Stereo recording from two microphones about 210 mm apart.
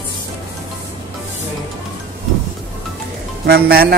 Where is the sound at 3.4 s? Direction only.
50° right (ahead or behind).